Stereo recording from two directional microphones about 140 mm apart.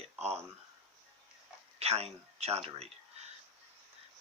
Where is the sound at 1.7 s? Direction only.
50° right (ahead or behind).